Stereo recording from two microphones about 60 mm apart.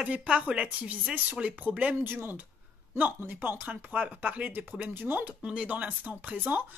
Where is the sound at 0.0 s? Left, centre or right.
Centre.